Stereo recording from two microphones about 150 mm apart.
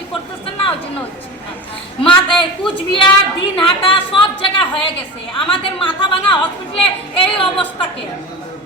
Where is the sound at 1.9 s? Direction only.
35° left (ahead or behind).